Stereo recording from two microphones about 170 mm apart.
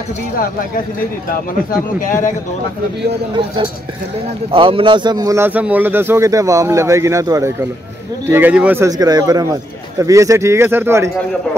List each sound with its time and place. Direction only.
2.0 s speech: 50° left (ahead or behind)
4.5 s a man's voice: 30° right (ahead or behind); by 11.1 s 15° right (ahead or behind)